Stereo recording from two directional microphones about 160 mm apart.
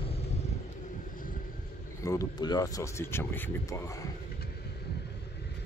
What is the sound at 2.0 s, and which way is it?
Speech, 20° left (ahead or behind).